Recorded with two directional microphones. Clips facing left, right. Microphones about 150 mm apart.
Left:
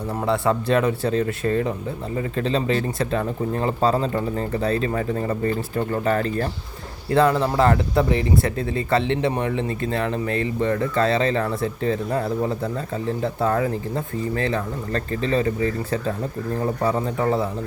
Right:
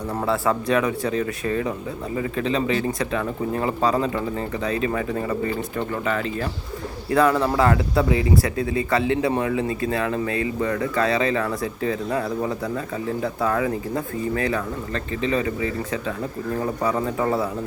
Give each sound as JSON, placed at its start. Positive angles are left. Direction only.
{"t": 0.3, "sound": "speech", "side_deg": 30}
{"t": 7.1, "sound": "speech", "side_deg": 30}